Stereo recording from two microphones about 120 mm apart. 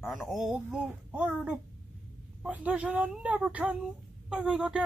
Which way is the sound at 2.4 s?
10° right (ahead or behind).